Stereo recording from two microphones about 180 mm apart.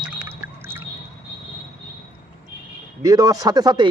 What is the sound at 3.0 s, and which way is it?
Speech, 20° right (ahead or behind).